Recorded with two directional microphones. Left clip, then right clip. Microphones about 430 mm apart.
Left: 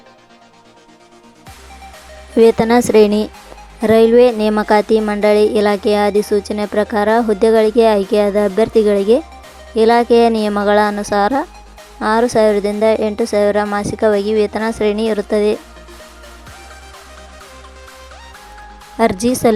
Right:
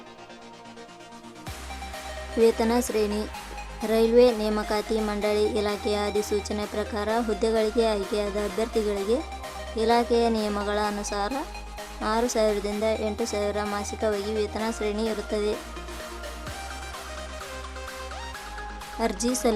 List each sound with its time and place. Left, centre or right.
2.4 s speech: centre
18.9 s speech: centre